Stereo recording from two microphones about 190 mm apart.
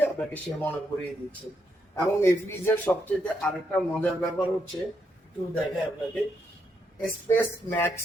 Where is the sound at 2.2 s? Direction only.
15° left (ahead or behind).